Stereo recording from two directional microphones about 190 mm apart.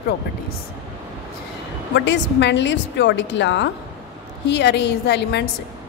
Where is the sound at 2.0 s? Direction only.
70° left (ahead or behind).